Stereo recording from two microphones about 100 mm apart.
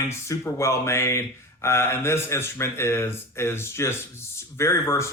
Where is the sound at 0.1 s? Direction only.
30° left (ahead or behind).